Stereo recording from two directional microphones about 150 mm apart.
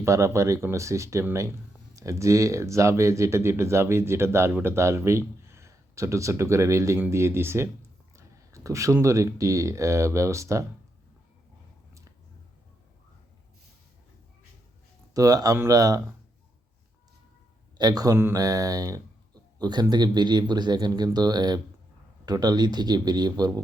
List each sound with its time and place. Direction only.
0.0 s speech: 20° right (ahead or behind)
15.1 s speech: 25° right (ahead or behind)
17.7 s speech: 25° right (ahead or behind)